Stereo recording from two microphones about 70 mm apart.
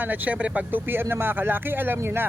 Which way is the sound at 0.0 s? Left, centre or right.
Right.